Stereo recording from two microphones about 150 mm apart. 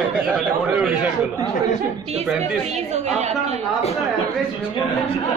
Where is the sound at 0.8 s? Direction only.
10° right (ahead or behind).